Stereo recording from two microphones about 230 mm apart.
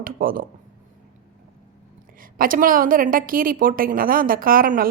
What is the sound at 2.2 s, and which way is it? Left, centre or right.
A woman's voice, right.